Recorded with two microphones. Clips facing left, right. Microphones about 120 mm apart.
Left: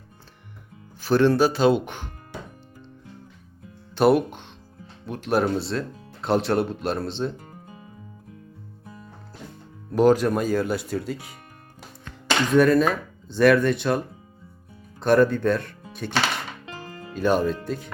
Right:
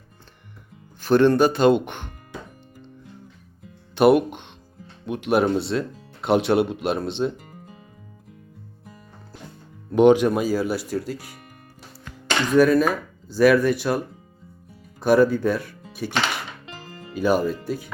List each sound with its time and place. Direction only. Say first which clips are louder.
1.0 s speech: right 2 dB; 5° left (ahead or behind)
3.9 s speech: right 2 dB; centre (ahead or behind)
7.5 s music: even; 20° left (ahead or behind)
9.9 s speech: right 3 dB; centre (ahead or behind)
15.0 s speech: right 1 dB; 5° right (ahead or behind)
15.9 s music: right 3 dB; 5° right (ahead or behind)
17.2 s speech: right 1 dB; 5° right (ahead or behind)